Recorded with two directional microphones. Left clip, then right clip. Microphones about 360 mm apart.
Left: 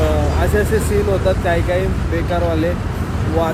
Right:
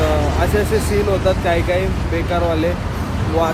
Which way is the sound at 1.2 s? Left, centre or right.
Centre.